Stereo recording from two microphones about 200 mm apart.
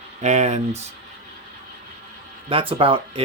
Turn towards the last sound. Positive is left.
turn(degrees=-30)  # may be behind; listen again after turning